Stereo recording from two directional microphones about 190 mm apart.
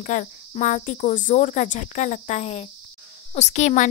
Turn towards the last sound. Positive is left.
turn(degrees=40)  # may be behind; listen again after turning